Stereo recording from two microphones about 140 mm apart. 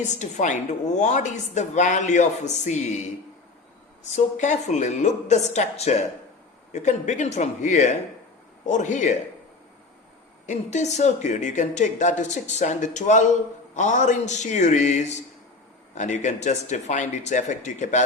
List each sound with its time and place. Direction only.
0.1 s a woman's voice: 60° left (ahead or behind)
4.1 s a woman's voice: 60° left (ahead or behind)
10.4 s a woman's voice: 60° left (ahead or behind)